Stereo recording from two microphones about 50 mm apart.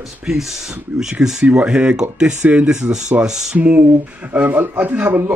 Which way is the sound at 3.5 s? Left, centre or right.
Right.